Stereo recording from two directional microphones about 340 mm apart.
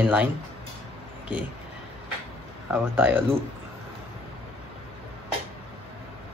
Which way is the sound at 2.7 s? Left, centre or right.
Centre.